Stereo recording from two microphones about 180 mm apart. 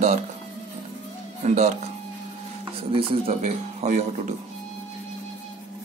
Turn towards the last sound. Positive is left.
turn(degrees=-40)  # may be behind; listen again after turning